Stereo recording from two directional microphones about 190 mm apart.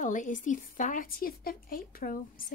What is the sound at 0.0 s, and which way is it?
A woman's voice, 40° left (ahead or behind).